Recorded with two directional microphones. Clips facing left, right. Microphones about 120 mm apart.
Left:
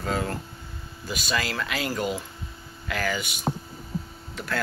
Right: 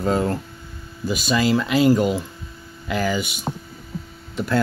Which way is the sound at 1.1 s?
15° right (ahead or behind).